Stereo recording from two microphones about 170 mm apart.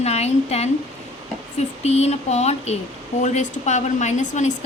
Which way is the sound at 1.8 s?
40° left (ahead or behind).